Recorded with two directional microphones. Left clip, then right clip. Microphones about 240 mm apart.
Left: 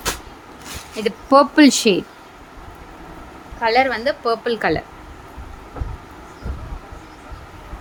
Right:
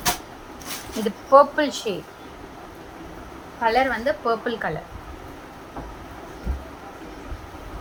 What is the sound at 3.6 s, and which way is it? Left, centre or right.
A woman's voice, left.